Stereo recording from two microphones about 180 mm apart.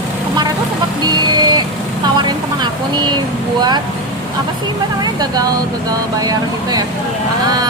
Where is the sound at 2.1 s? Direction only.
25° right (ahead or behind).